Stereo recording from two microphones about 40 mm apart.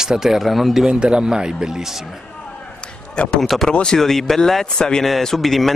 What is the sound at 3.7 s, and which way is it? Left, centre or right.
Speech, left.